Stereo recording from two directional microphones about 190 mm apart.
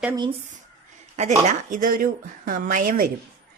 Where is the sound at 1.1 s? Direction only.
35° right (ahead or behind).